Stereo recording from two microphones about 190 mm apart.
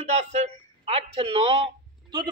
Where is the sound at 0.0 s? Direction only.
35° right (ahead or behind).